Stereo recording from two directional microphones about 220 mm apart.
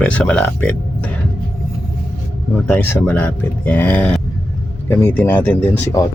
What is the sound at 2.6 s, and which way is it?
Speech, 5° left (ahead or behind).